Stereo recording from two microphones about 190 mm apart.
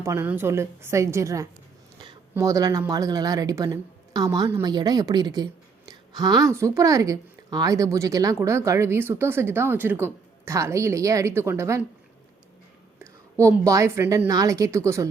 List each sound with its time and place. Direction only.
0.0 s a woman's voice: 15° right (ahead or behind)
4.7 s a woman's voice: 20° right (ahead or behind)
13.0 s whispering: 15° right (ahead or behind)
13.7 s a woman's voice: 15° right (ahead or behind)